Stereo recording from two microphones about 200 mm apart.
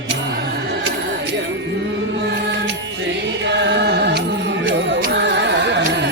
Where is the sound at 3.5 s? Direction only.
60° right (ahead or behind).